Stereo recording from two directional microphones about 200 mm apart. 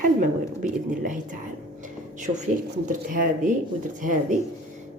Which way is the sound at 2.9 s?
40° right (ahead or behind).